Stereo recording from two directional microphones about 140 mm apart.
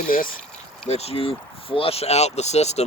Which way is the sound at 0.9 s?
50° left (ahead or behind).